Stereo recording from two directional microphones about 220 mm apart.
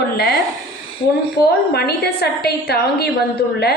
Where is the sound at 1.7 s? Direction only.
45° left (ahead or behind).